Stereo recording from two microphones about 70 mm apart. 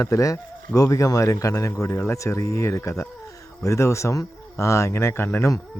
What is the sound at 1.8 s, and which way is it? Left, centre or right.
Speech, left.